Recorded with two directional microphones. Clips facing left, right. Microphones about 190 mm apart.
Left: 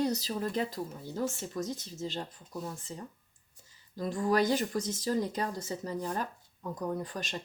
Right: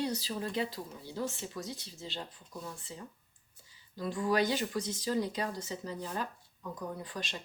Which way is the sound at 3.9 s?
45° left (ahead or behind).